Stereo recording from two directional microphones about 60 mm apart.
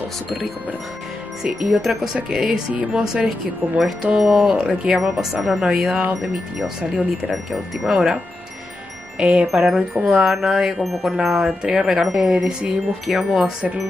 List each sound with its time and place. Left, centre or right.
1.4 s speech: centre
7.2 s chime: centre
9.2 s chime: centre
9.5 s chime: centre
11.6 s speech: centre
13.0 s chime: centre